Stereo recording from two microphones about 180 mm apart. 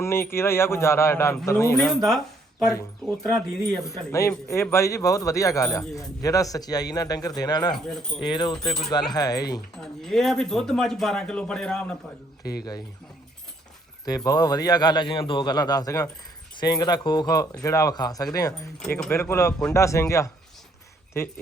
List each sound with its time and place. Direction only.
0.0 s speech: 15° left (ahead or behind)
1.7 s speech: 5° left (ahead or behind)
4.1 s speech: 15° left (ahead or behind)
9.8 s speech: centre (ahead or behind)
12.4 s speech: 60° left (ahead or behind)
14.3 s speech: 20° left (ahead or behind)
18.8 s speech: 5° left (ahead or behind)
19.1 s speech: 15° left (ahead or behind)